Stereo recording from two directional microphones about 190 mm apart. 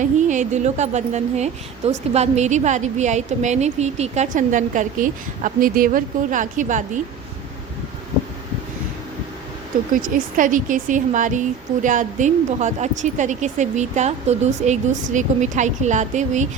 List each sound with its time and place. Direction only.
0.0 s a woman's voice: 40° right (ahead or behind)
9.9 s a woman's voice: 45° right (ahead or behind)